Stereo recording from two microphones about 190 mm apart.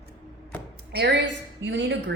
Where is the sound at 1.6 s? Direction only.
70° right (ahead or behind).